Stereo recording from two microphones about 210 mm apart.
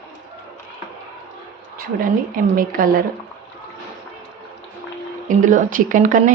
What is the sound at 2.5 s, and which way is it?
Speech, 40° right (ahead or behind).